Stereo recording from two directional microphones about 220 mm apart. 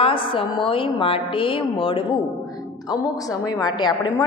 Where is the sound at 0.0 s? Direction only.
25° left (ahead or behind).